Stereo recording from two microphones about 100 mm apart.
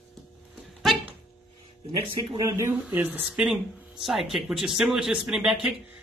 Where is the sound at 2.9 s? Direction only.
15° right (ahead or behind).